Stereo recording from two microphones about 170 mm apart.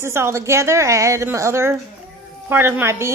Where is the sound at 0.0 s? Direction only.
15° right (ahead or behind).